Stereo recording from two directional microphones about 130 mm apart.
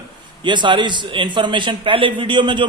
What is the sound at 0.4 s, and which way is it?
A man's voice, 35° right (ahead or behind).